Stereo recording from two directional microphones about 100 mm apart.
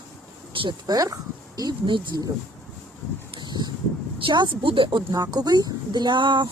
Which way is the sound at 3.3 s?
50° right (ahead or behind).